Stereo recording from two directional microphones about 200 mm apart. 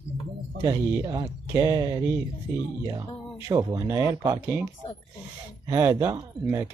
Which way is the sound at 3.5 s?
20° right (ahead or behind).